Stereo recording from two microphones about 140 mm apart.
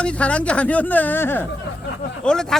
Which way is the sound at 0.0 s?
10° left (ahead or behind).